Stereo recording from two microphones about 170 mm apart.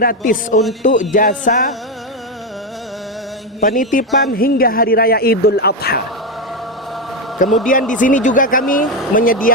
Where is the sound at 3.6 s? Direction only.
50° left (ahead or behind); by 6.0 s 65° left (ahead or behind).